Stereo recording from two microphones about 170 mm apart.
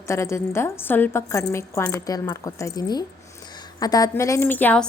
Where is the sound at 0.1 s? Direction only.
15° left (ahead or behind).